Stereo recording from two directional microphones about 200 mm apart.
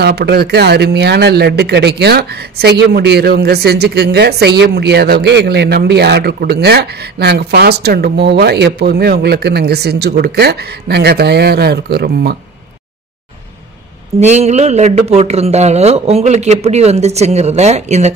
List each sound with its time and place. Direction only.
0.0 s speech: 55° right (ahead or behind)
14.2 s a man's voice: 35° right (ahead or behind)